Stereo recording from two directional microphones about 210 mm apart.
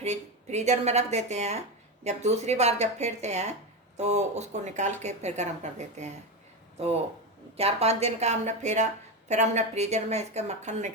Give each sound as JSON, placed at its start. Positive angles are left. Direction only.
{"t": 0.0, "sound": "speech", "side_deg": -30}
{"t": 7.5, "sound": "speech", "side_deg": -30}